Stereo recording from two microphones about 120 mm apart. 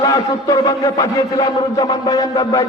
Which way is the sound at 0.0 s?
30° left (ahead or behind).